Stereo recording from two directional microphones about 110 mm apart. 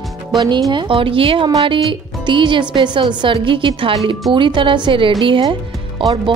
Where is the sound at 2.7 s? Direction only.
45° right (ahead or behind).